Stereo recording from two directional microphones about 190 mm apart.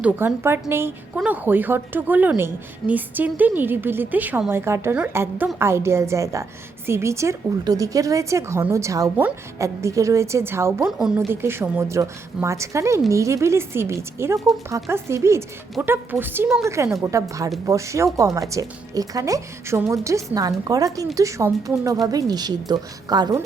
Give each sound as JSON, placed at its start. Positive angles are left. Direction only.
{"t": 0.0, "sound": "a woman's voice", "side_deg": -10}
{"t": 10.8, "sound": "a woman's voice", "side_deg": 0}